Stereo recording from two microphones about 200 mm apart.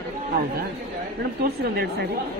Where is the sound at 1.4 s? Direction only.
50° right (ahead or behind).